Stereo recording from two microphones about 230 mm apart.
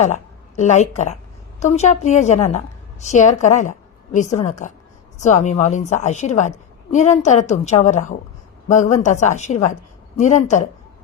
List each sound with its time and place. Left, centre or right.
0.0 s a woman's voice: left